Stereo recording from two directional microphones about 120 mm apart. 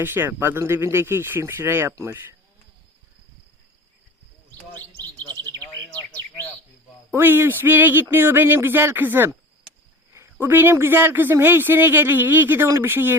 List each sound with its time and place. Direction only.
0.0 s speech: 20° right (ahead or behind)
5.9 s bird: 10° left (ahead or behind)
7.1 s speech: 20° right (ahead or behind)
10.4 s speech: 20° right (ahead or behind)